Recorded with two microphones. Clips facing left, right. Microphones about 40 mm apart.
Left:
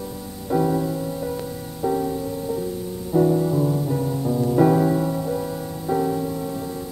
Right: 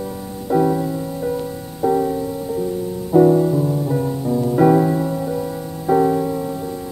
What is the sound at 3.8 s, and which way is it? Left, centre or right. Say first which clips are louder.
Music: right 3 dB; centre.